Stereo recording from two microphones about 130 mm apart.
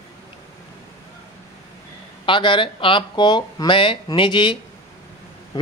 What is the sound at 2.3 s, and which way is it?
Speech, 40° left (ahead or behind).